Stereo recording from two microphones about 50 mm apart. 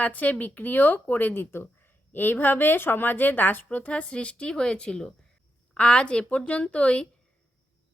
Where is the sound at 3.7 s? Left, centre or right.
Left.